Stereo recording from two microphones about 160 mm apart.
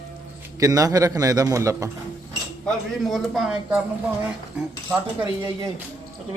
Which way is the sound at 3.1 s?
Centre (ahead or behind).